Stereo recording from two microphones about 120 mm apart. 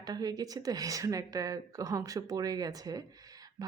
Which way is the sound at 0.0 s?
35° right (ahead or behind).